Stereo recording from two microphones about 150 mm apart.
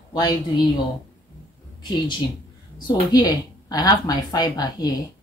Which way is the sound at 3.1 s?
25° left (ahead or behind).